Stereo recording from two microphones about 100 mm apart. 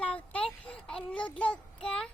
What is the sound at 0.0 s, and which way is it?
Child singing, 10° left (ahead or behind).